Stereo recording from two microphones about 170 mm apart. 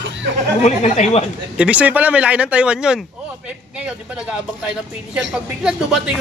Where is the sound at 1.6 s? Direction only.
5° right (ahead or behind).